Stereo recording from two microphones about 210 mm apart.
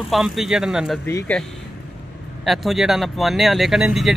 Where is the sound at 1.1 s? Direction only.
10° left (ahead or behind).